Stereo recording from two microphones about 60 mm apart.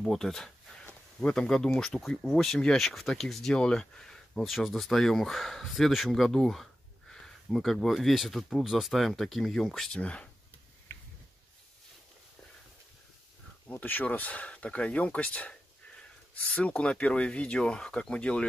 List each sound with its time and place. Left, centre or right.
0.0 s speech: centre
2.0 s speech: centre
2.3 s speech: centre
4.5 s speech: centre
6.1 s a sound: centre
7.4 s speech: centre
9.9 s speech: centre
13.7 s speech: left